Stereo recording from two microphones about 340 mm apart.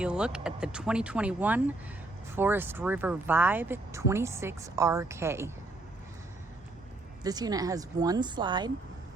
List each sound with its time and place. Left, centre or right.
0.0 s speech: centre
7.3 s speech: centre